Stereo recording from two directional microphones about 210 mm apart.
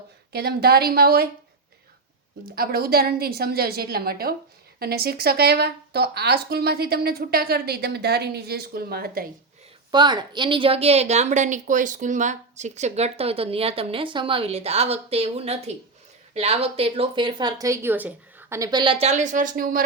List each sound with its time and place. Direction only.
0.3 s speech: 50° right (ahead or behind)
2.6 s speech: 45° right (ahead or behind)
9.9 s a woman's voice: 20° right (ahead or behind); by 19.8 s 40° right (ahead or behind)